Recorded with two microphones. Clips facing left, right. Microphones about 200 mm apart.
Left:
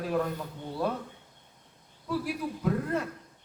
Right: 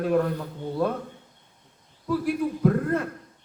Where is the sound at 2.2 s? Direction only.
50° right (ahead or behind).